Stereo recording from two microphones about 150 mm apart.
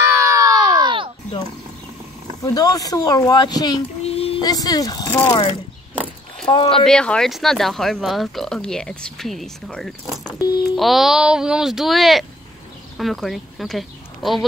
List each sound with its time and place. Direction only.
0.0 s crowd: 15° right (ahead or behind); by 1.1 s 30° right (ahead or behind)
2.4 s speech: 25° left (ahead or behind)
4.0 s female singing: 40° left (ahead or behind)
4.4 s speech: 25° left (ahead or behind)
6.7 s speech: 5° left (ahead or behind)
10.2 s speech: 25° left (ahead or behind)
10.8 s speech: centre (ahead or behind)